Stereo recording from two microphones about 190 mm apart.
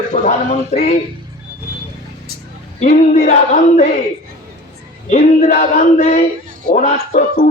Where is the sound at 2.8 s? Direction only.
40° left (ahead or behind).